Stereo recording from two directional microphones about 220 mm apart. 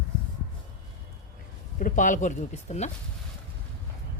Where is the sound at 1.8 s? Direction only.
35° left (ahead or behind).